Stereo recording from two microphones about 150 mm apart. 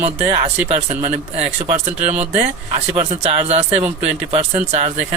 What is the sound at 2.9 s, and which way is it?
Speech, 45° right (ahead or behind).